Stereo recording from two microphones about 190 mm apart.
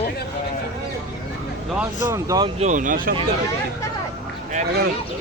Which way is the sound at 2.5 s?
40° right (ahead or behind).